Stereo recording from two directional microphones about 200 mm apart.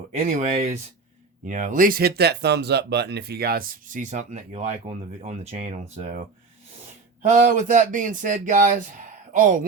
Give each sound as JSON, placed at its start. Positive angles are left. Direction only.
{"t": 0.3, "sound": "speech", "side_deg": -35}